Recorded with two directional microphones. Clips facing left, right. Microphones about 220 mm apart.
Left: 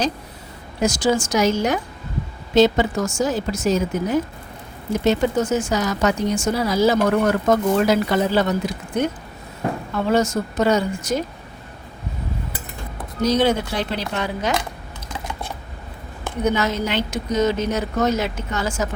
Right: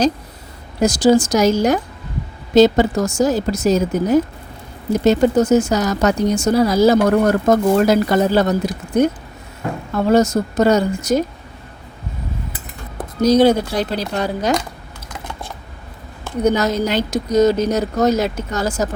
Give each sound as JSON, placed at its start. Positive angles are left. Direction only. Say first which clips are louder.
{"t": 0.8, "sound": "speech", "louder": "right 6 dB", "side_deg": -35}
{"t": 13.2, "sound": "speech", "louder": "right 6 dB", "side_deg": -40}
{"t": 16.4, "sound": "speech", "louder": "right 4 dB", "side_deg": -40}